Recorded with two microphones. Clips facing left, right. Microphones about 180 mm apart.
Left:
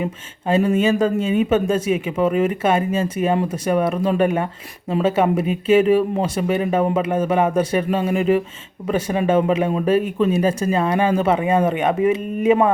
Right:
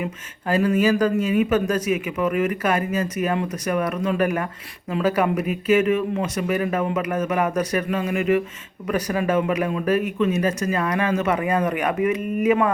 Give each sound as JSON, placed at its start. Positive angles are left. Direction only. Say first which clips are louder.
{"t": 0.0, "sound": "speech", "louder": "left 4 dB", "side_deg": 25}